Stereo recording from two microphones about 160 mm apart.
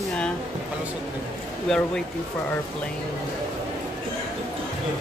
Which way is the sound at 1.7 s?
5° left (ahead or behind).